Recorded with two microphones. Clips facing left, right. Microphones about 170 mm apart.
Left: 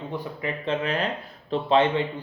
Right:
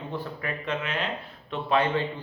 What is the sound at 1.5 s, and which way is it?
Speech, 25° left (ahead or behind).